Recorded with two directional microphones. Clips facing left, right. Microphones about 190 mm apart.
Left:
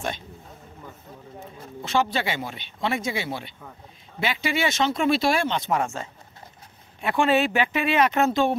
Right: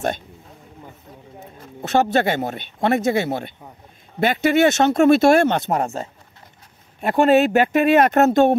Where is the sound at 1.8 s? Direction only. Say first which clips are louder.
Right 6 dB; 45° right (ahead or behind).